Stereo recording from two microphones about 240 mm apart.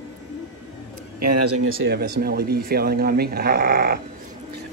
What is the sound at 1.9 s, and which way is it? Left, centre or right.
Speech, right.